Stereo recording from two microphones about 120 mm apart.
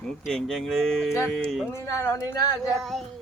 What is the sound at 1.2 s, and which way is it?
Speech, 15° left (ahead or behind).